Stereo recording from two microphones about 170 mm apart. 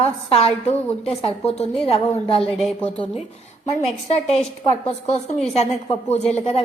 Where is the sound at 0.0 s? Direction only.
35° left (ahead or behind).